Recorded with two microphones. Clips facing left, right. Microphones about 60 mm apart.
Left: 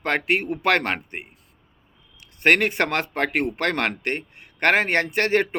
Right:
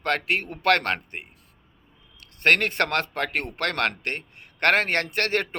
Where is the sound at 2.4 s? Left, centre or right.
Centre.